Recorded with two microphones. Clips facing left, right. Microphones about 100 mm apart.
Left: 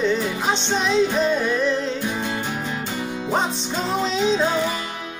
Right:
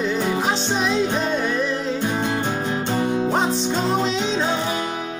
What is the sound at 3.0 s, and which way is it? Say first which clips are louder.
Music: right 7 dB; 30° right (ahead or behind).